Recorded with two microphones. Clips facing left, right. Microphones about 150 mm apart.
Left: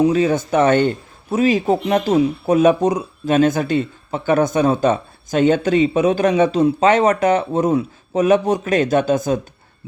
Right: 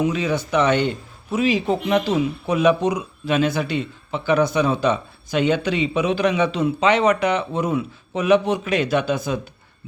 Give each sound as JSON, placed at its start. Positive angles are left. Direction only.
{"t": 0.0, "sound": "a man's voice", "side_deg": 40}